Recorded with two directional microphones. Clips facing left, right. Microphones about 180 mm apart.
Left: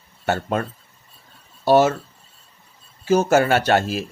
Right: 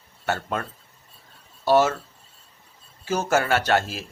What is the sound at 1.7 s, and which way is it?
Speech, 20° left (ahead or behind).